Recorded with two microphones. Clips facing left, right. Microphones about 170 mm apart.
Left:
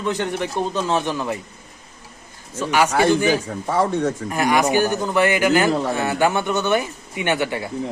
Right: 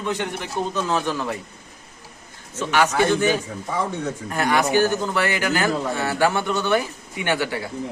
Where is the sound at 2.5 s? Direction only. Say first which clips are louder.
Left 1 dB; 10° left (ahead or behind).